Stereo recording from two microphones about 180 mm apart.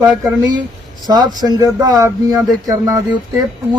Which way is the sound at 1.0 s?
20° right (ahead or behind).